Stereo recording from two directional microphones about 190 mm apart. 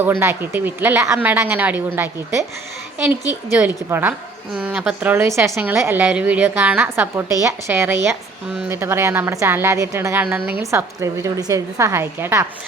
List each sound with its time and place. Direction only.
0.0 s speech: 10° right (ahead or behind)
5.5 s a woman's voice: 5° right (ahead or behind)